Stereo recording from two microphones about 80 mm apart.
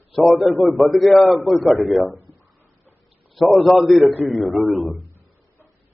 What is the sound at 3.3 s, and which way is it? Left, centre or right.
A man's voice, centre.